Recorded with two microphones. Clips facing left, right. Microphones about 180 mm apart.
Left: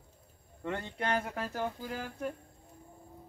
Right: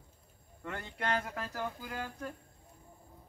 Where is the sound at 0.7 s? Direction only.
25° left (ahead or behind).